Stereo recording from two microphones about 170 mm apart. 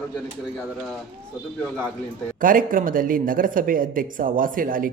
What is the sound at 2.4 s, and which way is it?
Speech, 55° right (ahead or behind).